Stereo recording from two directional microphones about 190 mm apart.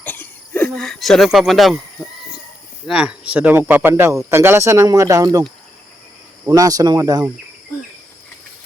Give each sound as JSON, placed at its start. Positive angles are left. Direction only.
{"t": 0.0, "sound": "a sound", "side_deg": 10}
{"t": 2.8, "sound": "speech", "side_deg": -5}
{"t": 6.5, "sound": "speech", "side_deg": -20}